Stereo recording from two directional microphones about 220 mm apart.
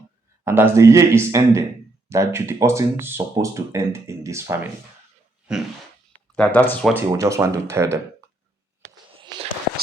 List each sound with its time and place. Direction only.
0.4 s speech: 10° right (ahead or behind)
6.3 s speech: 5° left (ahead or behind)
6.9 s speech: 10° right (ahead or behind)
9.2 s a sound: 20° right (ahead or behind)